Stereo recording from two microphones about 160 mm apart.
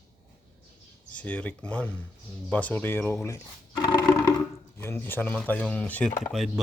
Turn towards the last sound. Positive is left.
turn(degrees=0)  # may be behind; listen again after turning